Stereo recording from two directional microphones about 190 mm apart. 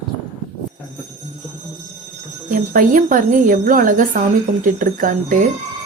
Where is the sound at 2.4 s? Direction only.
45° right (ahead or behind).